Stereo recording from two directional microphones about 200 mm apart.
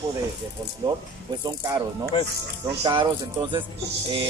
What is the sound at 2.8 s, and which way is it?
Speech, 25° right (ahead or behind).